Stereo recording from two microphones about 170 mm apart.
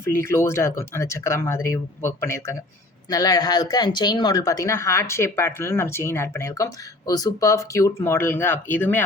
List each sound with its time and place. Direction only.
0.0 s speech: 15° left (ahead or behind)